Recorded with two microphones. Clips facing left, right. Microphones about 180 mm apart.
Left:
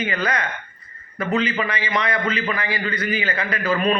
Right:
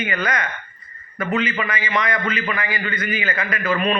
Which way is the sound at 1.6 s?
30° left (ahead or behind).